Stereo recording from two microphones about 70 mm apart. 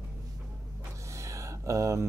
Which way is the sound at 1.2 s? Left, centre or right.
Right.